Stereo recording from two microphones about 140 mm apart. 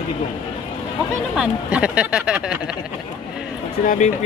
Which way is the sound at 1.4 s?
10° right (ahead or behind).